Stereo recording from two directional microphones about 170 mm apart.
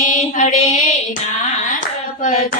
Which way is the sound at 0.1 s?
45° left (ahead or behind).